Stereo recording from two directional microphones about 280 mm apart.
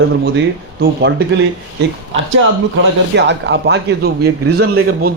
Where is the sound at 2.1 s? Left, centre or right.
Right.